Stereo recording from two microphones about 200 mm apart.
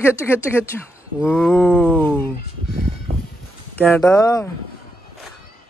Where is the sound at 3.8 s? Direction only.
5° left (ahead or behind).